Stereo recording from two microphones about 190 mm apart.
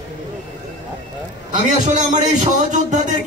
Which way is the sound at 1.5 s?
40° right (ahead or behind).